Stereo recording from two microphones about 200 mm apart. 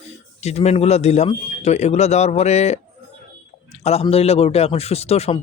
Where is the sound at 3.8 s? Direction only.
30° left (ahead or behind).